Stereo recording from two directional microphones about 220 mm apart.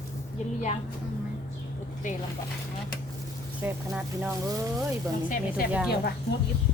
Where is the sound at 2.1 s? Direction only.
35° left (ahead or behind).